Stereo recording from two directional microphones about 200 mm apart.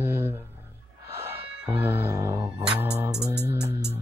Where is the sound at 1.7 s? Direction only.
10° right (ahead or behind).